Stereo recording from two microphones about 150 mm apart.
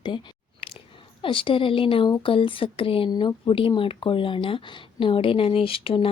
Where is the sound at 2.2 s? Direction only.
35° left (ahead or behind).